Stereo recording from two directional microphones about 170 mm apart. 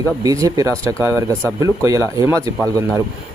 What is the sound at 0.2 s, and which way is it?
Speech, 20° right (ahead or behind).